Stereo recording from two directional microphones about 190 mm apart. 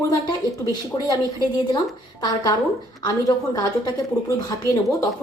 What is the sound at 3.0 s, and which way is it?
A woman's voice, 20° left (ahead or behind).